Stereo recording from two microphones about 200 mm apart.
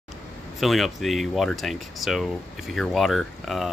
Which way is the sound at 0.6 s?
Centre (ahead or behind).